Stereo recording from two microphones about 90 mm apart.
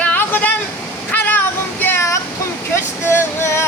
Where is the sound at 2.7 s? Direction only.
30° left (ahead or behind).